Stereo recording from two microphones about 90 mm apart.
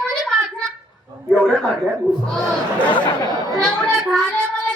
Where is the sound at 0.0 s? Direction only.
5° left (ahead or behind).